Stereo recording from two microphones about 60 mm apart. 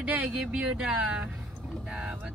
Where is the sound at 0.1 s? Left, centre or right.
Centre.